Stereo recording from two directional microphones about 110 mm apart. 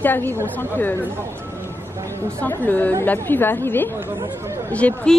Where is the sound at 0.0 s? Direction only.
20° left (ahead or behind).